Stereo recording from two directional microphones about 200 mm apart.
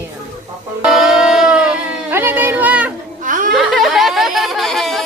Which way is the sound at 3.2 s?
40° right (ahead or behind).